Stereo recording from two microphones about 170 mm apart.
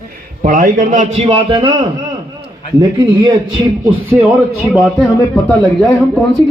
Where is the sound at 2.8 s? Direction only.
25° right (ahead or behind).